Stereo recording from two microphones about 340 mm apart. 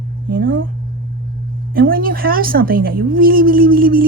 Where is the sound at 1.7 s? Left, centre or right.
Right.